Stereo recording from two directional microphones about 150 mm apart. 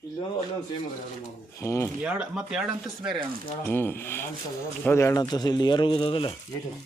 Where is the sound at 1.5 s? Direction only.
20° left (ahead or behind).